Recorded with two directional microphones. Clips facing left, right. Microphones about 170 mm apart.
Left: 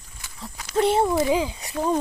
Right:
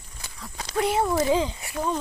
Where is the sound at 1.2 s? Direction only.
15° left (ahead or behind).